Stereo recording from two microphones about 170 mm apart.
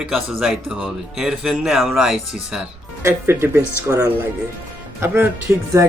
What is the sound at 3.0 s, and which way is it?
Speech, 15° right (ahead or behind).